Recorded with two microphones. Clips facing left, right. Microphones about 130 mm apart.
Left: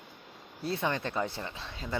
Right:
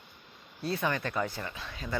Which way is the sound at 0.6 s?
25° left (ahead or behind).